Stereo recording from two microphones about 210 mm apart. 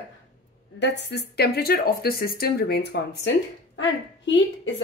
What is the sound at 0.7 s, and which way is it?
Speech, 55° left (ahead or behind).